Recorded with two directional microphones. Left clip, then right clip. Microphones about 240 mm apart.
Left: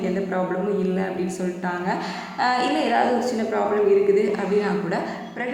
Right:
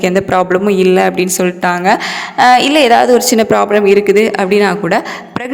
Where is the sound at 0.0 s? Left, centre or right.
Right.